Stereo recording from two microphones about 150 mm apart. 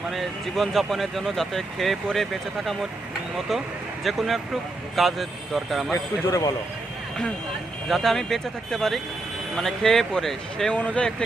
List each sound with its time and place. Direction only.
0.1 s speech: centre (ahead or behind)
4.0 s speech: centre (ahead or behind)
5.9 s a man's voice: 20° left (ahead or behind)
7.9 s speech: centre (ahead or behind)